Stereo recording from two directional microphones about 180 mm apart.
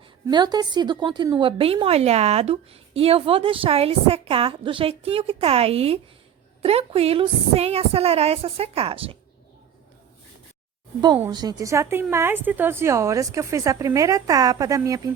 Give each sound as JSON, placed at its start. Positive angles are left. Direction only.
{"t": 0.3, "sound": "a woman's voice", "side_deg": -25}
{"t": 11.3, "sound": "a woman's voice", "side_deg": -25}